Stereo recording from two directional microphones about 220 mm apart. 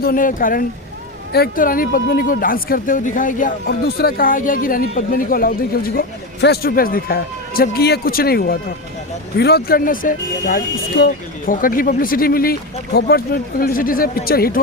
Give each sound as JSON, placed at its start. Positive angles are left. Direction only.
{"t": 0.0, "sound": "speech", "side_deg": 40}